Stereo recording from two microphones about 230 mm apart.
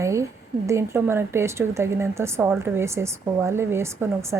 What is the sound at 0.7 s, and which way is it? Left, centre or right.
A woman's voice, centre.